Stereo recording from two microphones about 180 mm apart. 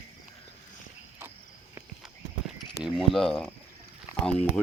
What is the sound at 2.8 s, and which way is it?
Speech, centre (ahead or behind).